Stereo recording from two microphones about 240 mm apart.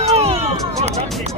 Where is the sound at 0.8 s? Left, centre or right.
Right.